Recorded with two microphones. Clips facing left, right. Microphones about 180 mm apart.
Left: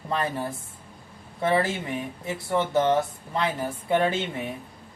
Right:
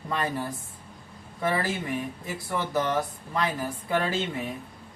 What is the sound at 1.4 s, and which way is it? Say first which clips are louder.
Speech: left 4 dB; 25° left (ahead or behind).